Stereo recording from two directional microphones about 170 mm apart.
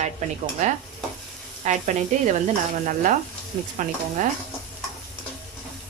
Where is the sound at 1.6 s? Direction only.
45° right (ahead or behind).